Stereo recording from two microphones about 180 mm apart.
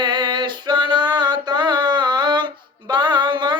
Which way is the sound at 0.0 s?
25° right (ahead or behind).